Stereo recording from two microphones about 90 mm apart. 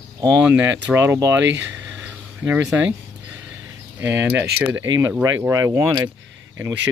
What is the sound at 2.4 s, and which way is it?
Speech, 20° right (ahead or behind).